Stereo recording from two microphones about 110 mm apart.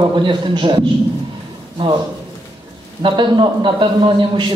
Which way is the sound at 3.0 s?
45° right (ahead or behind).